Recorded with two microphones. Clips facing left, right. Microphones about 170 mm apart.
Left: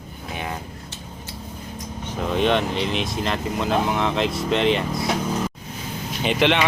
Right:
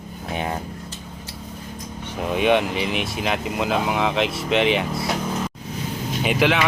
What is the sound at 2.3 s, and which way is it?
Speech, 10° right (ahead or behind).